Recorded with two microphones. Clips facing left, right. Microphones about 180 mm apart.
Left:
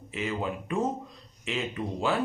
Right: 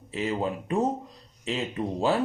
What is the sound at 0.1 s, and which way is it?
A man's voice, 35° right (ahead or behind).